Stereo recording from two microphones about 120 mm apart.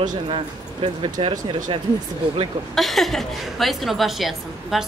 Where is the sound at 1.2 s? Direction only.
45° right (ahead or behind).